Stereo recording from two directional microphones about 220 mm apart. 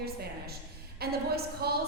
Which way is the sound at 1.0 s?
45° right (ahead or behind).